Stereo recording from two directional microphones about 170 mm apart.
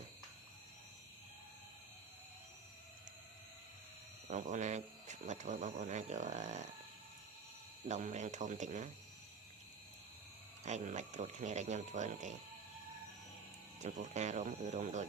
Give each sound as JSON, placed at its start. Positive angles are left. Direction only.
{"t": 4.3, "sound": "a sound", "side_deg": -45}
{"t": 7.9, "sound": "speech", "side_deg": -45}
{"t": 10.7, "sound": "speech", "side_deg": -45}
{"t": 13.7, "sound": "speech", "side_deg": -45}